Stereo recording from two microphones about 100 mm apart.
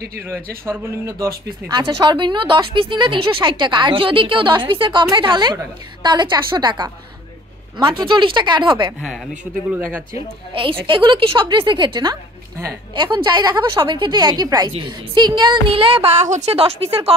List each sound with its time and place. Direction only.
0.2 s speech: 25° right (ahead or behind)
1.7 s a woman's voice: 50° right (ahead or behind)
9.4 s speech: 20° right (ahead or behind)
10.5 s a woman's voice: 60° right (ahead or behind); by 17.1 s 75° right (ahead or behind)